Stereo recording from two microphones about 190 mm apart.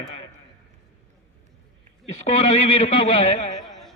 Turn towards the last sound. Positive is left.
turn(degrees=35)  # may be behind; listen again after turning